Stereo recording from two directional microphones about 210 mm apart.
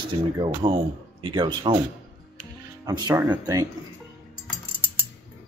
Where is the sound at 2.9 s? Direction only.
20° right (ahead or behind).